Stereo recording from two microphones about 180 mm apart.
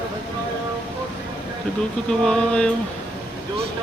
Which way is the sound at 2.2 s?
5° left (ahead or behind).